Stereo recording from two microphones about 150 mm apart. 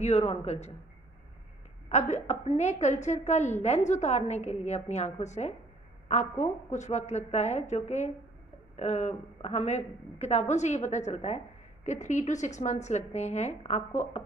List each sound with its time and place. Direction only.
0.3 s a woman's voice: 45° left (ahead or behind)
1.9 s a woman's voice: 50° left (ahead or behind)